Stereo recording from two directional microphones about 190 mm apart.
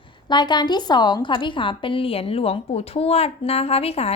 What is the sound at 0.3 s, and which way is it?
A woman's voice, 25° left (ahead or behind).